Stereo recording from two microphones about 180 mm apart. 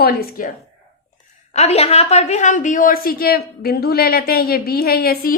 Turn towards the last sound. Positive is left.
turn(degrees=55)  # may be behind; listen again after turning